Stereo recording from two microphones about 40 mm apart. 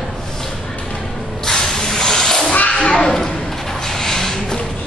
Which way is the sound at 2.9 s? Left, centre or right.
Centre.